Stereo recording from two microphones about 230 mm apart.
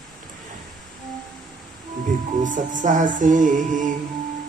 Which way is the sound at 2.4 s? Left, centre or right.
Right.